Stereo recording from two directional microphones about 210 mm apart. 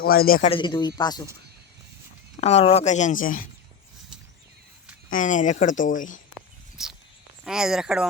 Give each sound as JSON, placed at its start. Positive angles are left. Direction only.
{"t": 0.0, "sound": "speech", "side_deg": 45}
{"t": 0.5, "sound": "speech", "side_deg": 20}
{"t": 2.4, "sound": "speech", "side_deg": 30}
{"t": 5.0, "sound": "speech", "side_deg": 40}
{"t": 6.3, "sound": "a sound", "side_deg": 0}
{"t": 7.4, "sound": "speech", "side_deg": -5}